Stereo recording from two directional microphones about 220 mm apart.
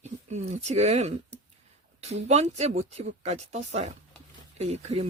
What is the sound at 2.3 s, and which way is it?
Speech, 30° right (ahead or behind).